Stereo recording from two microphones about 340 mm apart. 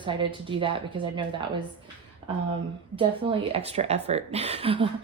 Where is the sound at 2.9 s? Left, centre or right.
Centre.